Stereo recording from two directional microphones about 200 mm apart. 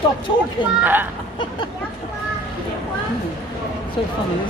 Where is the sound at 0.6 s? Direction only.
25° left (ahead or behind).